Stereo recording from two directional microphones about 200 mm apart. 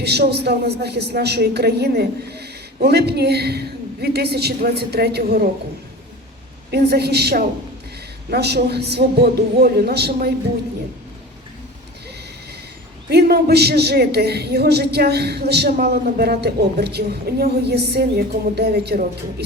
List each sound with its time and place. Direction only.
0.0 s a woman's voice: 55° right (ahead or behind)
6.7 s a woman's voice: 55° right (ahead or behind)
13.1 s a woman's voice: 55° right (ahead or behind)